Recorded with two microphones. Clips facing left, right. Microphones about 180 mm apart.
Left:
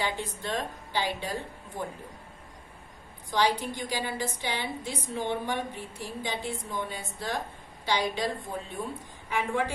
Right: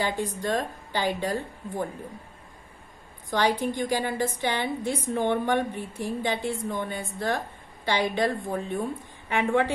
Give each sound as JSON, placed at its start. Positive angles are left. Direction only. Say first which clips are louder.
{"t": 0.0, "sound": "a woman's voice", "louder": "right 5 dB", "side_deg": -45}
{"t": 3.3, "sound": "a woman's voice", "louder": "right 2 dB", "side_deg": -50}
{"t": 9.3, "sound": "a woman's voice", "louder": "right 5 dB", "side_deg": -60}